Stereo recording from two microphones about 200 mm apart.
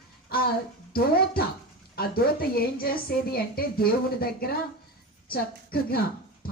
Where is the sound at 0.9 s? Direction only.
50° left (ahead or behind).